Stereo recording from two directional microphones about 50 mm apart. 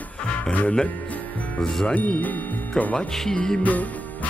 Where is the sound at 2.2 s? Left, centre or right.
Left.